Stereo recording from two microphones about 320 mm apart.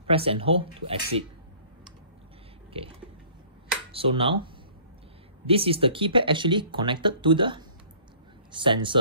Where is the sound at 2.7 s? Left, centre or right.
Centre.